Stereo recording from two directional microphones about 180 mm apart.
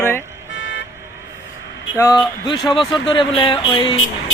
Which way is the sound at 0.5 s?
90° left.